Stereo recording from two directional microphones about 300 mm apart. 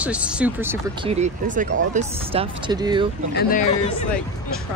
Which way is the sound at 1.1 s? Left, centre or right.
Right.